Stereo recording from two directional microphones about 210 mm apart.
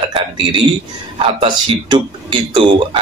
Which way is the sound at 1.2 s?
25° right (ahead or behind).